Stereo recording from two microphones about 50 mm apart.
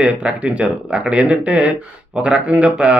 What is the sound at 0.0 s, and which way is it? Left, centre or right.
Speech, right.